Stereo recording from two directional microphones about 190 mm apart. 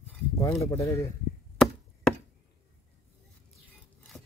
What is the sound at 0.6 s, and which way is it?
Chopping, 15° left (ahead or behind).